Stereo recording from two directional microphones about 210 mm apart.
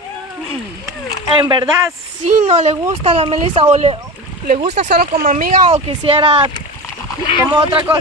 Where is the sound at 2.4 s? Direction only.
30° right (ahead or behind).